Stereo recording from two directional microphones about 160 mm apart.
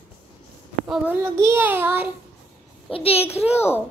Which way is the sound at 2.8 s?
35° left (ahead or behind).